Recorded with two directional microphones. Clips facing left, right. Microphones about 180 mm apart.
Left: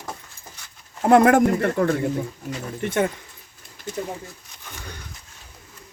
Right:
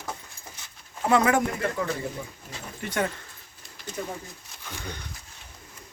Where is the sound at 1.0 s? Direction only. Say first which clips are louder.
Left 7 dB; 55° left (ahead or behind).